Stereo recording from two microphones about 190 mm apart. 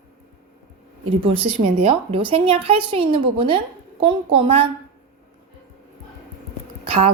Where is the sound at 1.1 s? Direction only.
30° right (ahead or behind).